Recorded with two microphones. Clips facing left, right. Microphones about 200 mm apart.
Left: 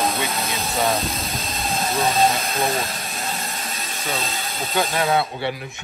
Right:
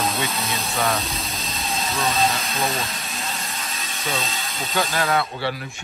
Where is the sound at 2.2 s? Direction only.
50° left (ahead or behind).